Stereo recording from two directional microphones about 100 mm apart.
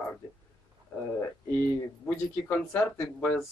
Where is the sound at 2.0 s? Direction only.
15° left (ahead or behind).